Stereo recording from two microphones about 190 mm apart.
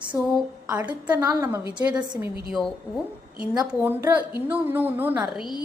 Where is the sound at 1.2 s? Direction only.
15° right (ahead or behind).